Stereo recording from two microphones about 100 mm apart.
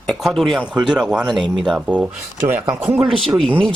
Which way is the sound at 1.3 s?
50° right (ahead or behind).